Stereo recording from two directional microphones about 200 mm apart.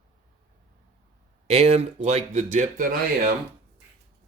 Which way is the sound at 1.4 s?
30° right (ahead or behind).